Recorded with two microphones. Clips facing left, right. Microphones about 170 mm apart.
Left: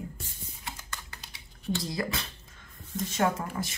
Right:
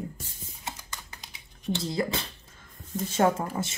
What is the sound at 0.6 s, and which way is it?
Typing, 20° right (ahead or behind).